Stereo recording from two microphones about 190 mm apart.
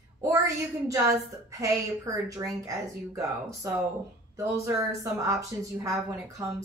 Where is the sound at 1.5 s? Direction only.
15° right (ahead or behind).